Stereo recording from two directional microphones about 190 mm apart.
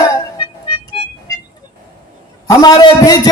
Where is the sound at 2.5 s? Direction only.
20° left (ahead or behind).